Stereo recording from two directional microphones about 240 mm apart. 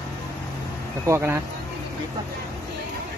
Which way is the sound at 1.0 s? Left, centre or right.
Centre.